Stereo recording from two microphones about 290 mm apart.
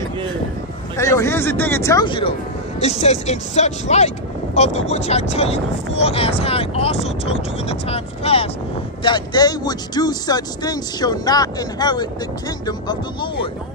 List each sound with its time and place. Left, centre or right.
0.9 s speech: centre